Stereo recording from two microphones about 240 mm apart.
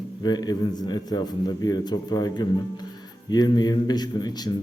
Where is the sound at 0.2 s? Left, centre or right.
Centre.